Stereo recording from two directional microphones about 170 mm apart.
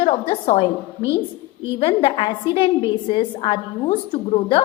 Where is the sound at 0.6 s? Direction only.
25° left (ahead or behind).